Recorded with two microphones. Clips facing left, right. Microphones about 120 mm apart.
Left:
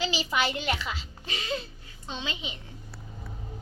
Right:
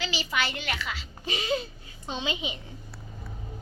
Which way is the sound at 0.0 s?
30° left (ahead or behind).